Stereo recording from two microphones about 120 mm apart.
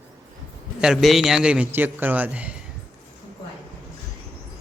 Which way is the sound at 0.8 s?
5° right (ahead or behind).